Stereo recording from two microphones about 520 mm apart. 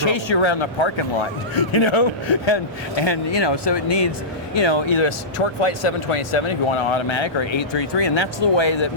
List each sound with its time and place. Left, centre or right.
0.0 s a man's voice: left